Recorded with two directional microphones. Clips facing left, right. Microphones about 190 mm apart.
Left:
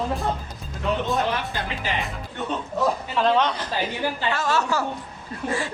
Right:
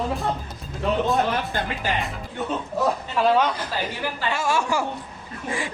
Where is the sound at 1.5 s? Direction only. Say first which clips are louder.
Right 3 dB; 50° right (ahead or behind).